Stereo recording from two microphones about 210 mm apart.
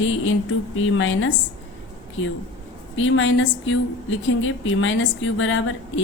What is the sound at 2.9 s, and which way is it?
A woman's voice, 65° left (ahead or behind).